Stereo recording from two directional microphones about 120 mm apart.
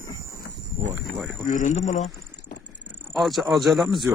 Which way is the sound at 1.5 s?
90° left.